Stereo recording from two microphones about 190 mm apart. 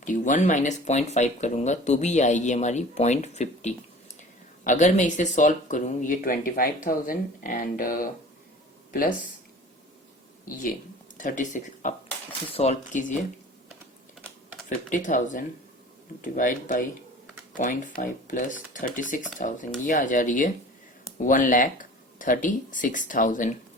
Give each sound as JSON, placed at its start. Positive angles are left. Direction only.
{"t": 0.0, "sound": "speech", "side_deg": 40}
{"t": 10.4, "sound": "speech", "side_deg": 45}
{"t": 14.8, "sound": "speech", "side_deg": 40}